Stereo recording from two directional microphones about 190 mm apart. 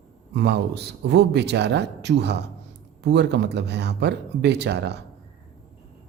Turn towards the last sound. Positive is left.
turn(degrees=-60)  # may be behind; listen again after turning